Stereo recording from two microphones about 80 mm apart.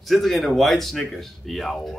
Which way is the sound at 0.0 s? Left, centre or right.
Centre.